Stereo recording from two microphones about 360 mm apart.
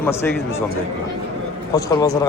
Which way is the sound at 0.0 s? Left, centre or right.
Centre.